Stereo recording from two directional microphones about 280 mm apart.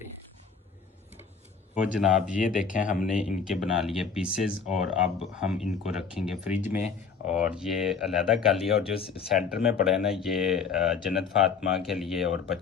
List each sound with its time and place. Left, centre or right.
1.8 s speech: centre
2.7 s speech: left
3.1 s speech: centre